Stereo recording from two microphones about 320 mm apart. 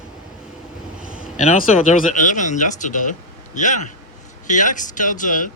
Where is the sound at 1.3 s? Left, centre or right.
Left.